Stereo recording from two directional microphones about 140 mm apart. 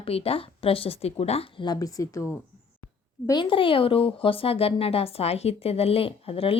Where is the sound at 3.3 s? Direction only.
35° left (ahead or behind).